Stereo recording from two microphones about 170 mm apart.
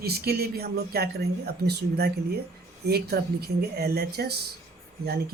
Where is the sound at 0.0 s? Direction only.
65° right (ahead or behind).